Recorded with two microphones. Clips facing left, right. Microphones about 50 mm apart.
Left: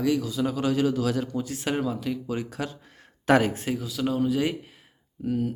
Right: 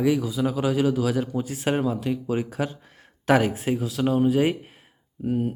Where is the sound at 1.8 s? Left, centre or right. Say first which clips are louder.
Right 3 dB; right.